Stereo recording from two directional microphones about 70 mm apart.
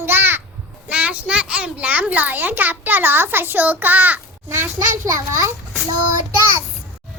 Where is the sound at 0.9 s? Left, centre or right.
Centre; by 5.5 s right.